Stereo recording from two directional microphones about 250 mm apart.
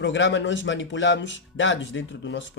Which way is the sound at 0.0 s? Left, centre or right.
Left.